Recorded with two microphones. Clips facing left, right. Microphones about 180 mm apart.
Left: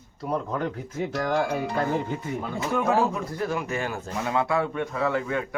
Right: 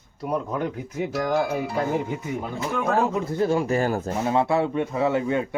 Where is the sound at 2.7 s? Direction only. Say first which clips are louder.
Even; 5° left (ahead or behind).